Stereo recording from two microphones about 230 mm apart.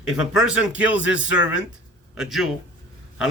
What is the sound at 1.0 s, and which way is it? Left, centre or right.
Speech, left.